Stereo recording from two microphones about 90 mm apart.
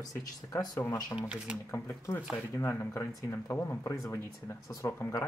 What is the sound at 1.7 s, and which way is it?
Speech, 30° left (ahead or behind).